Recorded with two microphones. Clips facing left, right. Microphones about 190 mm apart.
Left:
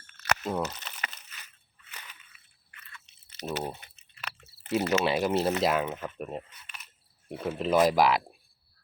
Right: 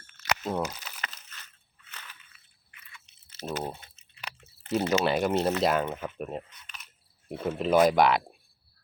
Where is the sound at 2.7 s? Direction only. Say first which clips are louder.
Left 2 dB; 15° right (ahead or behind).